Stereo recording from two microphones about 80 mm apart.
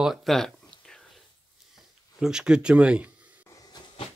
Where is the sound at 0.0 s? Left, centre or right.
Centre.